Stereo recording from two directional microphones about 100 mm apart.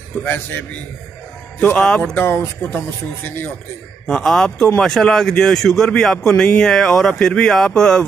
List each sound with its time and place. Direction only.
0.2 s speech: 15° left (ahead or behind)
1.7 s speech: 15° left (ahead or behind)
2.1 s speech: 25° left (ahead or behind)
4.1 s a man's voice: 5° left (ahead or behind)